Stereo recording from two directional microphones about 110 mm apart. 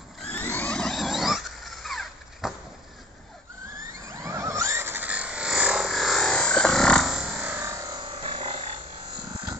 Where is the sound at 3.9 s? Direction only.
25° right (ahead or behind); by 7.4 s 5° right (ahead or behind).